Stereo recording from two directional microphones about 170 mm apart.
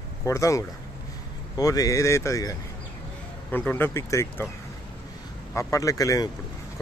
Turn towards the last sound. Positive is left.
turn(degrees=20)  # may be behind; listen again after turning